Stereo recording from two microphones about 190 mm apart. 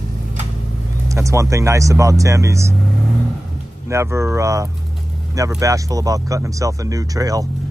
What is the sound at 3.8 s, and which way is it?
Speech, 15° right (ahead or behind).